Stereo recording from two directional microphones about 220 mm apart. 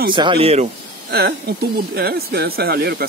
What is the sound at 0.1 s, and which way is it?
Speech, 20° right (ahead or behind).